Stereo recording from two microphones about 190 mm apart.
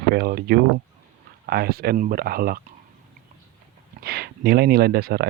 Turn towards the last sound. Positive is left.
turn(degrees=-55)  # may be behind; listen again after turning